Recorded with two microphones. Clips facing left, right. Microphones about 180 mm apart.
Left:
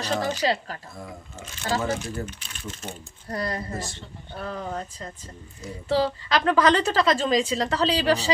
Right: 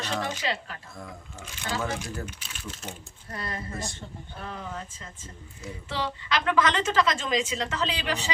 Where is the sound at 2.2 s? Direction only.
5° right (ahead or behind).